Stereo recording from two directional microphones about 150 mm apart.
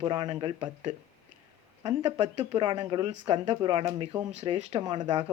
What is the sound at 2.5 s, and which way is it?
Speech, 30° right (ahead or behind).